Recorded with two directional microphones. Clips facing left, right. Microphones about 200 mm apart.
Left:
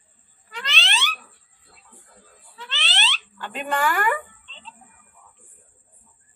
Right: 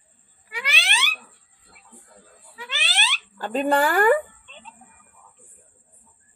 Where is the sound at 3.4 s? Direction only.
35° right (ahead or behind).